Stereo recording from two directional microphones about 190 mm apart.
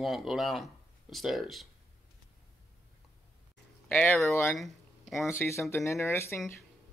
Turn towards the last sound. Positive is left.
turn(degrees=15)  # may be behind; listen again after turning